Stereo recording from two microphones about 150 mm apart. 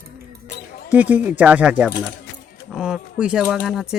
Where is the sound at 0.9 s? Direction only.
10° right (ahead or behind).